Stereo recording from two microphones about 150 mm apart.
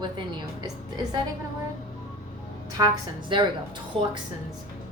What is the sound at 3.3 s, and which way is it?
Speech, 35° right (ahead or behind).